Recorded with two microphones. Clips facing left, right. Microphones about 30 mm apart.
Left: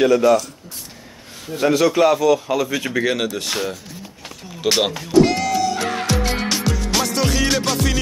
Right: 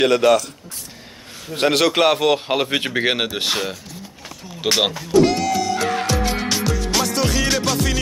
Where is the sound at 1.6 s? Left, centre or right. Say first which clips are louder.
Left 1 dB; right.